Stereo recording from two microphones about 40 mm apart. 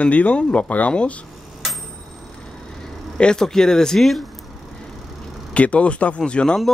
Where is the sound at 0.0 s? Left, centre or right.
Left.